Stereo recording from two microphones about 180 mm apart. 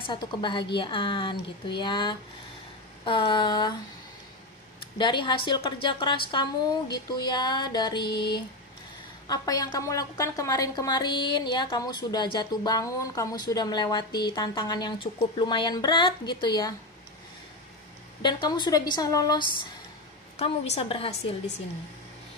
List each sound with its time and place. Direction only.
0.0 s a woman's voice: 25° left (ahead or behind)
4.7 s a woman's voice: 25° left (ahead or behind)
9.3 s a woman's voice: 20° left (ahead or behind)
18.2 s a woman's voice: 25° left (ahead or behind)
20.3 s a woman's voice: 35° left (ahead or behind)